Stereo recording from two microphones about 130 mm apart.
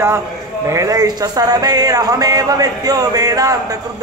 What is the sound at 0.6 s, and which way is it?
A man's voice, 25° right (ahead or behind).